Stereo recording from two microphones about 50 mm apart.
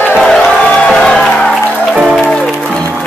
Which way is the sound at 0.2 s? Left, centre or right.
Centre.